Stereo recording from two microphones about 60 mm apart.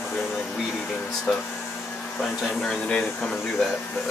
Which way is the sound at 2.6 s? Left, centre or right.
Centre.